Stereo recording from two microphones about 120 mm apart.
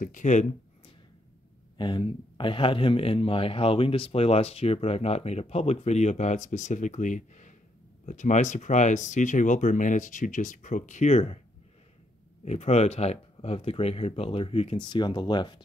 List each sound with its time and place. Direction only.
0.1 s speech: 85° left
1.8 s speech: 40° left (ahead or behind); by 11.3 s 70° left (ahead or behind)
12.4 s speech: 65° left (ahead or behind)
14.9 s speech: 40° left (ahead or behind)